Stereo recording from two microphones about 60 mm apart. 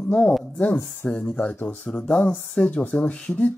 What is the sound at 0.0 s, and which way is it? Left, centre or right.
A woman's voice, centre.